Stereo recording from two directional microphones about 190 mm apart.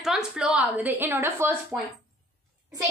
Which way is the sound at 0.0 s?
5° right (ahead or behind).